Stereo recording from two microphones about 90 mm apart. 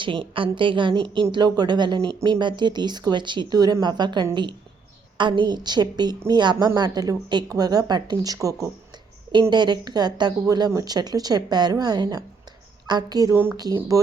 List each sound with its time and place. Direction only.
0.0 s a woman's voice: 70° right (ahead or behind)
1.3 s a woman's voice: 55° right (ahead or behind)
9.5 s a woman's voice: 55° right (ahead or behind)
13.3 s speech: 25° right (ahead or behind)
13.7 s speech: 40° right (ahead or behind)